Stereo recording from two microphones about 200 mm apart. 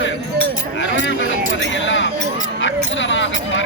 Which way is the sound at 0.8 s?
65° left (ahead or behind).